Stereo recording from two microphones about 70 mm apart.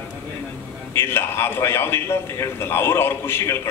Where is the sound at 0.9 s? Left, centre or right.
Left.